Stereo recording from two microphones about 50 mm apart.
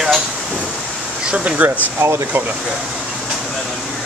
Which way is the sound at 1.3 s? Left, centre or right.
Right.